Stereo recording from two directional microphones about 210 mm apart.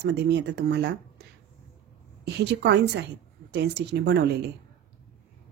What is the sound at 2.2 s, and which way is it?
A woman's voice, 55° right (ahead or behind).